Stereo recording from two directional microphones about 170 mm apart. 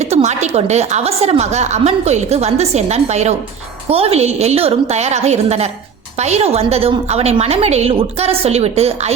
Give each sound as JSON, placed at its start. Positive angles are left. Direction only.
{"t": 0.1, "sound": "a woman's voice", "side_deg": -40}